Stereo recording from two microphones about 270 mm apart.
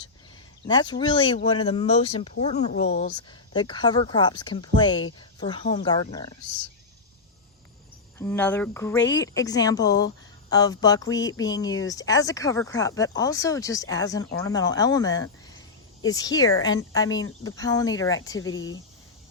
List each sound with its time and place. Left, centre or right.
0.7 s speech: centre
8.2 s speech: centre